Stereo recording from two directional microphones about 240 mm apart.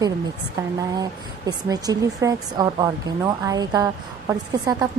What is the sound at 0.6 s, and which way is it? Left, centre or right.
A woman's voice, centre.